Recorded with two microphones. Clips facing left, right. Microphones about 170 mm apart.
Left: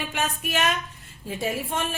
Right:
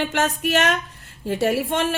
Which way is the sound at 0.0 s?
80° right.